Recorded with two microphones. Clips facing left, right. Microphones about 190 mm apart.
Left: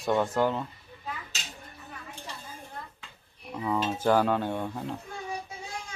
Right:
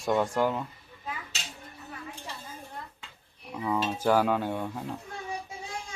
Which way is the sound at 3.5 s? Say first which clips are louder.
Even; centre (ahead or behind).